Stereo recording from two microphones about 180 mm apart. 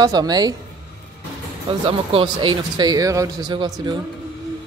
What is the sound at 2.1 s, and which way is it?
Speech, 30° right (ahead or behind).